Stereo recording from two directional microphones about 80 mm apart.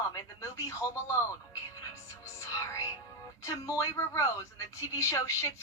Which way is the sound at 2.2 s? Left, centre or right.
Left.